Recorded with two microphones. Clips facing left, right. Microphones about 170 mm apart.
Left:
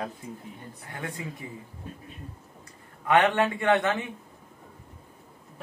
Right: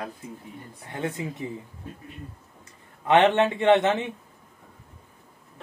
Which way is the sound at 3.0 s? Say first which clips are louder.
Right 3 dB; 20° right (ahead or behind).